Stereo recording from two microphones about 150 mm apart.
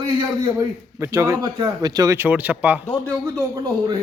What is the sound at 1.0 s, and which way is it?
Speech, 20° right (ahead or behind).